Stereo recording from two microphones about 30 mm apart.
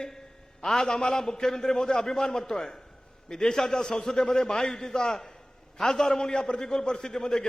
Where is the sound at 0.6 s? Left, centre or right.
Centre.